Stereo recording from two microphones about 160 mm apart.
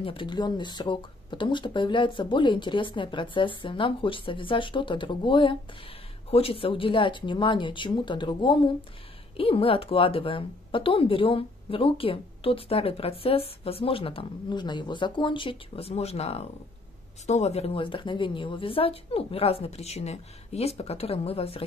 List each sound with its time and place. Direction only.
0.0 s speech: 30° left (ahead or behind)